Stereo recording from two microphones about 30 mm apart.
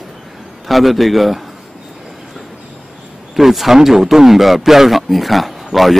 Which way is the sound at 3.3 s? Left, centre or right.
Centre.